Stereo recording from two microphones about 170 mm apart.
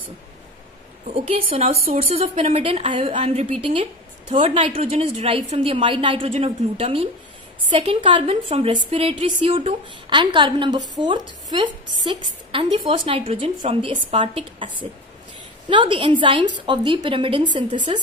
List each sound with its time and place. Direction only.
1.1 s a woman's voice: 35° right (ahead or behind)